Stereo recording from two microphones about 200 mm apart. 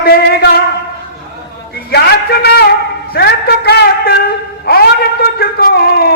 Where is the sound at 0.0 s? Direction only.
55° left (ahead or behind).